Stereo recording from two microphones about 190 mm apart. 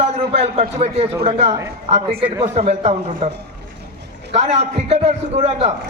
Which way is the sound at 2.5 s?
35° right (ahead or behind).